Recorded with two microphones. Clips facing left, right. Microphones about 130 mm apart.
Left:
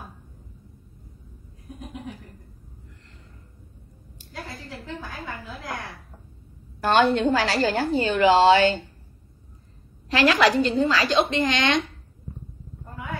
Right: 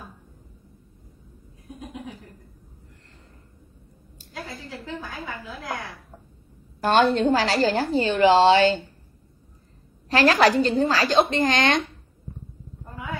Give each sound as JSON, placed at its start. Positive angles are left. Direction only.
{"t": 6.8, "sound": "a woman's voice", "side_deg": -40}
{"t": 10.0, "sound": "a woman's voice", "side_deg": -40}